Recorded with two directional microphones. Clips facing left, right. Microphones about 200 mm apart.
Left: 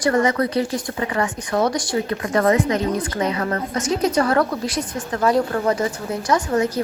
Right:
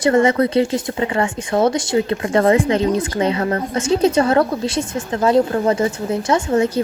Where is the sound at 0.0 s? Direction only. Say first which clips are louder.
Right 4 dB; 25° right (ahead or behind).